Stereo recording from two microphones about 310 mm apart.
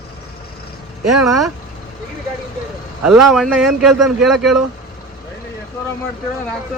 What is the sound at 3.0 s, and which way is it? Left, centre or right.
Speech, centre.